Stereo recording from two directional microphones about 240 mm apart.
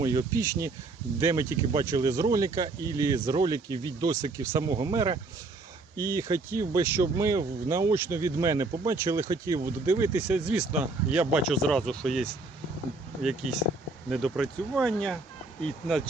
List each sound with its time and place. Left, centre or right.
0.0 s speech: centre